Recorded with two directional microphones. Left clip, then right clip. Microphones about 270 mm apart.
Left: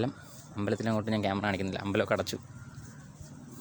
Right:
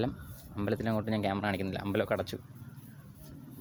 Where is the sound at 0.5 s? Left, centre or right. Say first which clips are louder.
Left 1 dB; centre.